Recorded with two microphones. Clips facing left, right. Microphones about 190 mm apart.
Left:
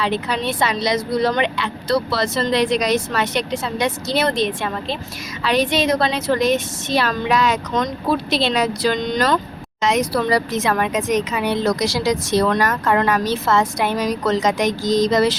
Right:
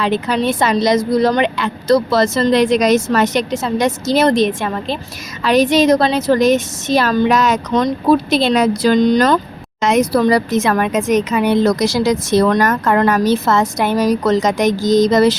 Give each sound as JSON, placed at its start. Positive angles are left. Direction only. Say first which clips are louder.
{"t": 0.0, "sound": "speech", "louder": "right 5 dB", "side_deg": -45}